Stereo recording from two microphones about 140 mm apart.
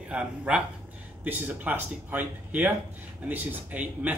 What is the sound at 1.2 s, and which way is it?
Speech, 10° right (ahead or behind).